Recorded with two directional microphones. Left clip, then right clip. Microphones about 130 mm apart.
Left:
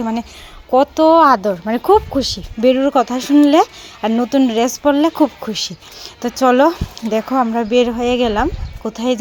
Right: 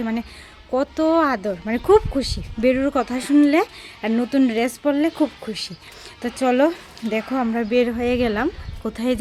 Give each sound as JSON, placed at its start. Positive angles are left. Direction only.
{"t": 0.7, "sound": "speech", "side_deg": 15}